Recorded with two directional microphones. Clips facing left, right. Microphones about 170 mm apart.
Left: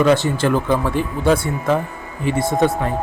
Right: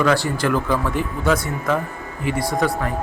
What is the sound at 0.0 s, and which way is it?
A man's voice, 20° left (ahead or behind).